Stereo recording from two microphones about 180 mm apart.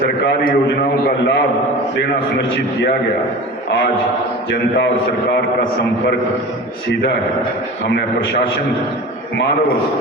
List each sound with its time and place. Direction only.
0.0 s a man's voice: 60° left (ahead or behind)
7.9 s a man's voice: 65° left (ahead or behind)